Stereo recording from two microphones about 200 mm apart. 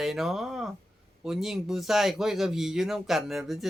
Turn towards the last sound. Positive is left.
turn(degrees=0)  # may be behind; listen again after turning